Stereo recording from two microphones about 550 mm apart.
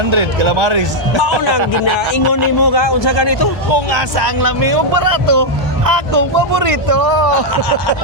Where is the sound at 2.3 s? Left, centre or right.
Left.